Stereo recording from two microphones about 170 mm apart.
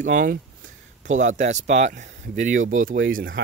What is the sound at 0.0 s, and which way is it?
Speech, 55° right (ahead or behind).